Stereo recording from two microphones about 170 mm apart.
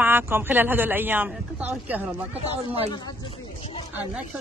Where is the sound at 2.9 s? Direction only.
25° left (ahead or behind).